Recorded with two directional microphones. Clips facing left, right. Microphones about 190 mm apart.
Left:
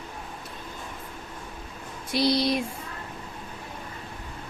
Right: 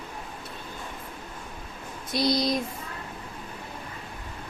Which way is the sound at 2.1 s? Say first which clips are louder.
Left 1 dB; 30° left (ahead or behind).